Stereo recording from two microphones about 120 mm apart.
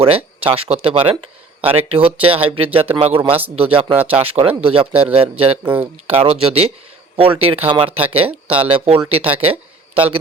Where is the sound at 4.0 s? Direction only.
10° right (ahead or behind).